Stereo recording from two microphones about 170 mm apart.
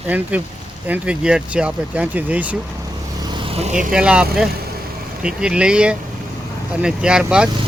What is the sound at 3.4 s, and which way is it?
Vehicle, 35° right (ahead or behind).